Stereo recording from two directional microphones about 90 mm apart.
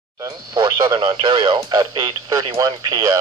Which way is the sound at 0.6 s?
55° right (ahead or behind).